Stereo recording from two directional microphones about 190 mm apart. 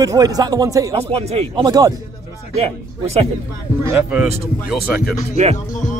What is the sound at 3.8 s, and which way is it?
Speech, 15° right (ahead or behind).